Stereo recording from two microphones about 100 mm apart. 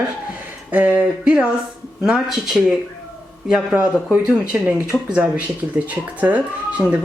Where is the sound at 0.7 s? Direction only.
15° right (ahead or behind).